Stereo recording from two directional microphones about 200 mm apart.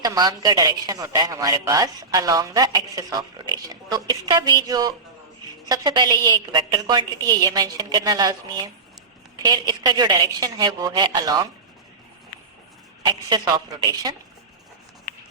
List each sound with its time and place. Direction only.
0.0 s speech: 20° right (ahead or behind)
13.1 s speech: 20° right (ahead or behind)